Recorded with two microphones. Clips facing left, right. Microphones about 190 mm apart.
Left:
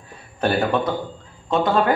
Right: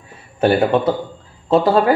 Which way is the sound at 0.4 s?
25° right (ahead or behind).